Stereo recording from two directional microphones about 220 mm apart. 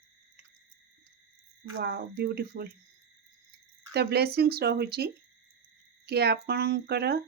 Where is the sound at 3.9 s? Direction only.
45° right (ahead or behind).